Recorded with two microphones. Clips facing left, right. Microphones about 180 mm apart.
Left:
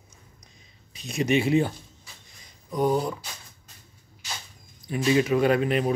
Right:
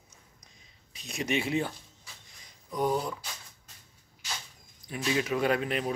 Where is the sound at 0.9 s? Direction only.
Centre (ahead or behind).